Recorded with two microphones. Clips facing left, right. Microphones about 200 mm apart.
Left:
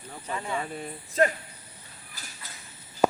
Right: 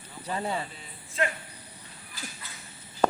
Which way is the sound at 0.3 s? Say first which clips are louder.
Right 1 dB; 35° right (ahead or behind).